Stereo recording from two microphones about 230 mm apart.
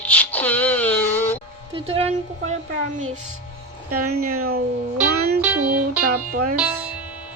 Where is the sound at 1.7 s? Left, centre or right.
Right.